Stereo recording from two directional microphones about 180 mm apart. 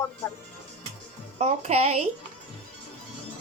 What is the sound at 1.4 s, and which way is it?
Speech, 40° right (ahead or behind).